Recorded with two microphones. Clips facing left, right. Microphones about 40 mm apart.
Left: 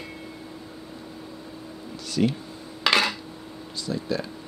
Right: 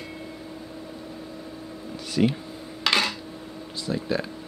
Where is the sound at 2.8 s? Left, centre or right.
Centre.